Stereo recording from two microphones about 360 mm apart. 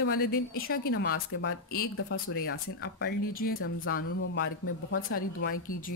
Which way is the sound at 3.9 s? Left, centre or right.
Left.